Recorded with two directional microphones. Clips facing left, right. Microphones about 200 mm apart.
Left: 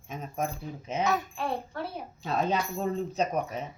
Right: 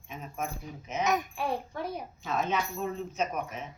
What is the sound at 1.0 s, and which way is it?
Speech, 15° right (ahead or behind).